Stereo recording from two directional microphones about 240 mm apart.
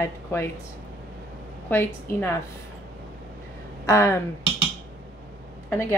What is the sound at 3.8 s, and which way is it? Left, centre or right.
Speech, centre.